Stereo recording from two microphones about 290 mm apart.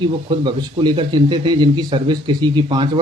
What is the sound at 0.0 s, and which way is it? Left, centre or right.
Speech, centre.